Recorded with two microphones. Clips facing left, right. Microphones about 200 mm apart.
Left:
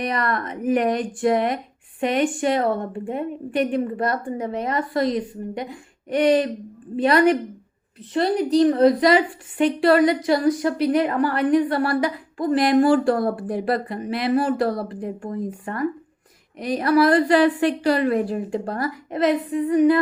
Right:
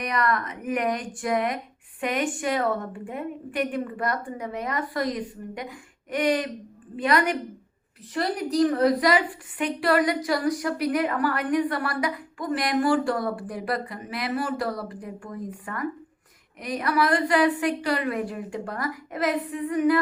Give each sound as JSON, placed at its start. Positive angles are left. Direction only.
{"t": 0.0, "sound": "a woman's voice", "side_deg": 30}